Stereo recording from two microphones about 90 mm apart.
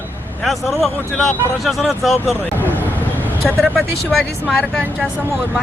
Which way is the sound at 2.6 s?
20° left (ahead or behind).